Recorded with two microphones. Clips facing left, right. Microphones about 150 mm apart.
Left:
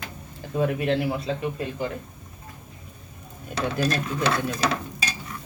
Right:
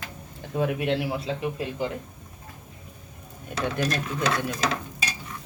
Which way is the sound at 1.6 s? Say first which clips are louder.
Even; 15° right (ahead or behind).